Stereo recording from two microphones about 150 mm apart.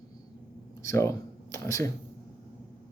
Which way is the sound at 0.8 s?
20° left (ahead or behind).